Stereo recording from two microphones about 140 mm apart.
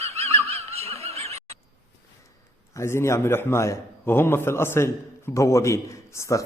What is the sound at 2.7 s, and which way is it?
A man's voice, 20° left (ahead or behind).